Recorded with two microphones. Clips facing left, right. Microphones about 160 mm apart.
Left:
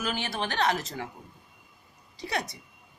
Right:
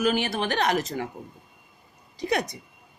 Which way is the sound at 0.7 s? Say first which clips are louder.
Right 6 dB; 15° right (ahead or behind).